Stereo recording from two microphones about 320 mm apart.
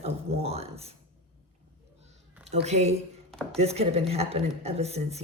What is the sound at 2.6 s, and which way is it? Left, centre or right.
Speech, right.